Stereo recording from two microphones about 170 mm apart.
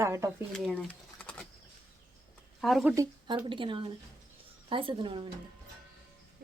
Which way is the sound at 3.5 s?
30° right (ahead or behind).